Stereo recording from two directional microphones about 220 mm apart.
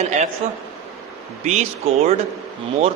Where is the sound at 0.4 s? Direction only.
30° right (ahead or behind).